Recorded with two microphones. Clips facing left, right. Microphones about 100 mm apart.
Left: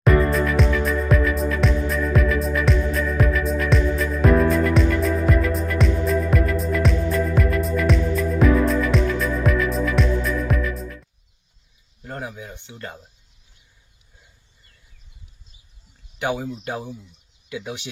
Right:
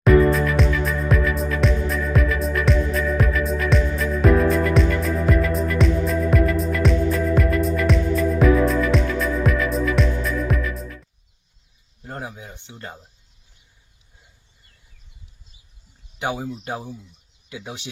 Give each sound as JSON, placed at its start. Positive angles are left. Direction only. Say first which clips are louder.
{"t": 0.0, "sound": "music", "louder": "right 3 dB", "side_deg": 0}
{"t": 12.0, "sound": "a sound", "louder": "left 1 dB", "side_deg": -25}
{"t": 17.5, "sound": "speech", "louder": "left 4 dB", "side_deg": -30}